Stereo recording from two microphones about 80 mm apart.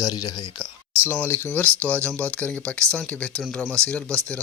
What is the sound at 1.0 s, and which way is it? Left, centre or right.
Speech, left.